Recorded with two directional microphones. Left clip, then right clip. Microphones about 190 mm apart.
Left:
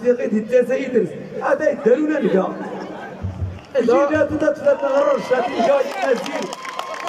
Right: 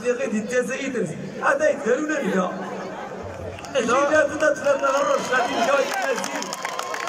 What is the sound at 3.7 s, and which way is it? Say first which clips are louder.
Speech: left 3 dB; 25° left (ahead or behind).